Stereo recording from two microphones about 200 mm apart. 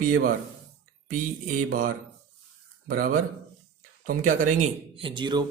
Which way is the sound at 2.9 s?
45° right (ahead or behind).